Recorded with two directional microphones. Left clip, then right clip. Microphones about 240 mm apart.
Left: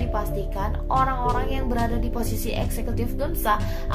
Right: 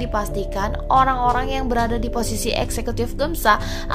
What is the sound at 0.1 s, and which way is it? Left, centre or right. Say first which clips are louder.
A woman's voice: right 5 dB; right.